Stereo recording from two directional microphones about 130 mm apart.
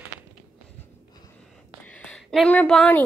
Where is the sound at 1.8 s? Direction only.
10° left (ahead or behind).